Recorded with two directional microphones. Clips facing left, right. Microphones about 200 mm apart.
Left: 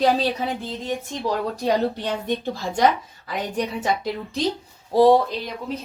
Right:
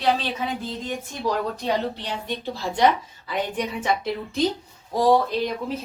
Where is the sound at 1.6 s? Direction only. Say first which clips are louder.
Left 4 dB; 50° left (ahead or behind).